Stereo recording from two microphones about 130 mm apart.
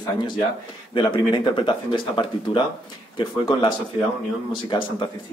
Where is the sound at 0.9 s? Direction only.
40° left (ahead or behind).